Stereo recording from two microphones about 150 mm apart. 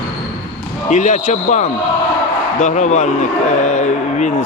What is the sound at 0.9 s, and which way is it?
A man's voice, 55° left (ahead or behind).